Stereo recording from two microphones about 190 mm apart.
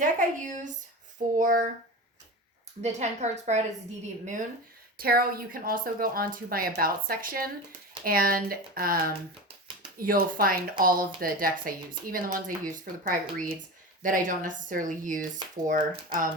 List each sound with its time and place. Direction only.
0.0 s speech: 40° right (ahead or behind)
2.8 s a woman's voice: 35° right (ahead or behind)
4.9 s speech: 50° right (ahead or behind)